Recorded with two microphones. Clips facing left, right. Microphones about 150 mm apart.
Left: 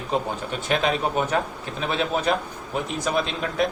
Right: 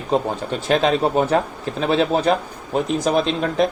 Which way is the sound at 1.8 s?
35° right (ahead or behind).